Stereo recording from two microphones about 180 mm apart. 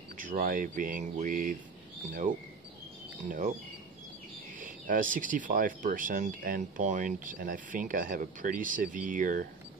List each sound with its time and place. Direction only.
0.2 s speech: 50° right (ahead or behind)
4.6 s speech: 50° right (ahead or behind)